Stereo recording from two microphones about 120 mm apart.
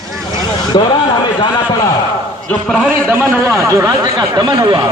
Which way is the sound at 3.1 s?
20° right (ahead or behind).